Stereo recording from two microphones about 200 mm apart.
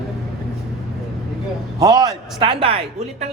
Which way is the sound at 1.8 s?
20° right (ahead or behind).